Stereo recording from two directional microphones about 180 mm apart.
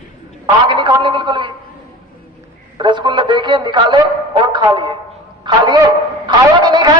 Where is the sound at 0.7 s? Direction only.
25° right (ahead or behind).